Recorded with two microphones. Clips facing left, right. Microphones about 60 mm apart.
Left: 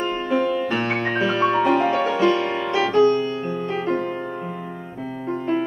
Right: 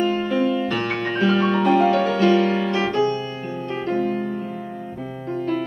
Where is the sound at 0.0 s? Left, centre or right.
Left.